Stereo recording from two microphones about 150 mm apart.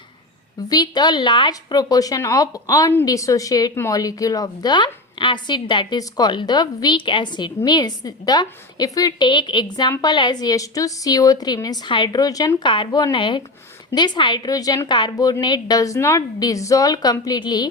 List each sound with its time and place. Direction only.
0.7 s a woman's voice: 30° left (ahead or behind)